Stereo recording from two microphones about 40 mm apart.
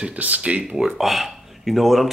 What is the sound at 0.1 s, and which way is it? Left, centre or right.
Speech, right.